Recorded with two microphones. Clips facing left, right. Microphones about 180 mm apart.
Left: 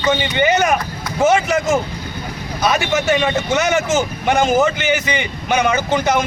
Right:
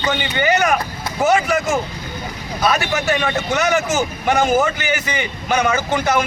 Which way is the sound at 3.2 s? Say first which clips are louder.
Left 2 dB; 20° left (ahead or behind).